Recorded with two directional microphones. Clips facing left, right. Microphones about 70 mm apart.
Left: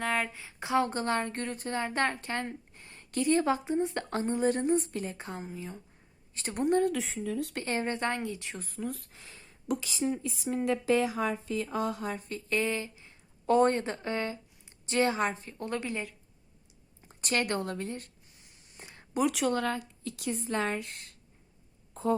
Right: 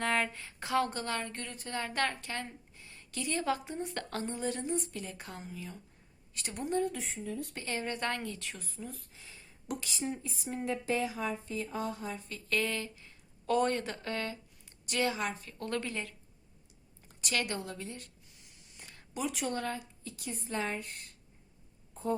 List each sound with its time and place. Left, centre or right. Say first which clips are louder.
0.0 s speech: left 1 dB; centre
0.6 s a woman's voice: left 3 dB; left
1.7 s a woman's voice: left 3 dB; left
6.6 s speech: left 6 dB; left
6.9 s speech: left 6 dB; left
7.6 s a woman's voice: left 3 dB; left
8.5 s speech: left 8 dB; left
10.2 s speech: left 6 dB; left
12.3 s speech: left 2 dB; left
17.2 s a sound: left 5 dB; left
19.3 s speech: left 6 dB; left
22.0 s a sound: left 5 dB; left